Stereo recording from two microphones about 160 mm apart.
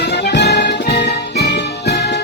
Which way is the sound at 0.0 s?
90° left.